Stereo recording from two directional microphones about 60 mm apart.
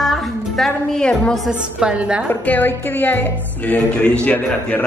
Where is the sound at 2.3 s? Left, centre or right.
Left.